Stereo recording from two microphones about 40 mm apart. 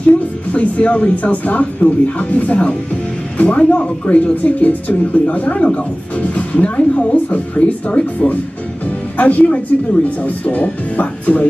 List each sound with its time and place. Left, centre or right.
0.0 s speech: left
9.1 s speech: left